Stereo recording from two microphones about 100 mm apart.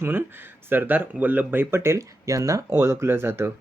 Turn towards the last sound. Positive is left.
turn(degrees=-25)  # may be behind; listen again after turning